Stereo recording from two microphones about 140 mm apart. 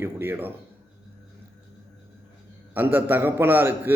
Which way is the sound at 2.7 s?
15° right (ahead or behind).